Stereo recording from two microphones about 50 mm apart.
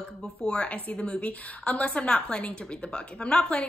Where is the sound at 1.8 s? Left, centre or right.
Centre.